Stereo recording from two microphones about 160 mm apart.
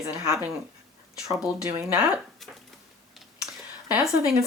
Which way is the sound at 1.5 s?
5° right (ahead or behind).